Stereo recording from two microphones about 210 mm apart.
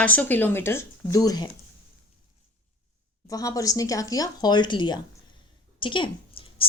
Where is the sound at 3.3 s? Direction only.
15° left (ahead or behind).